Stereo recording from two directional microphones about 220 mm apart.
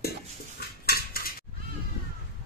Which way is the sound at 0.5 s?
45° left (ahead or behind).